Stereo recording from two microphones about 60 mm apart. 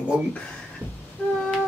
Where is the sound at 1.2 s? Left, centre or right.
Left.